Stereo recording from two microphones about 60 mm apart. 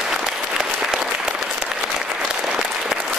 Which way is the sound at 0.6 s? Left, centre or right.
Centre.